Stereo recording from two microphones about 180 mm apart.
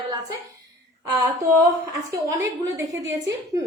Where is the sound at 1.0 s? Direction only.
20° right (ahead or behind).